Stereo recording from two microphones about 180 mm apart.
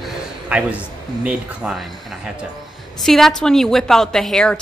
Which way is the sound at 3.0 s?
Centre (ahead or behind).